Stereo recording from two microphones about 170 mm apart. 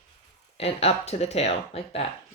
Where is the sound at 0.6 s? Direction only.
35° left (ahead or behind).